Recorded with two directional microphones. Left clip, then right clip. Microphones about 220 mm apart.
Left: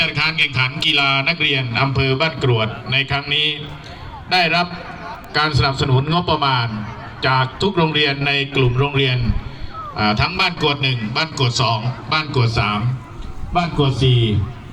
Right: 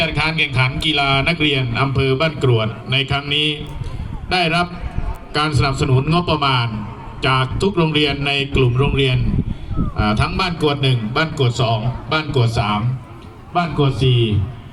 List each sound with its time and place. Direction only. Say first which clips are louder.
0.0 s a man's voice: left 1 dB; 35° right (ahead or behind)
13.5 s a man's voice: even; 15° left (ahead or behind)